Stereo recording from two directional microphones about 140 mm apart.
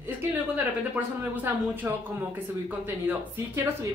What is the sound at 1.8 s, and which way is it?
Speech, 15° right (ahead or behind).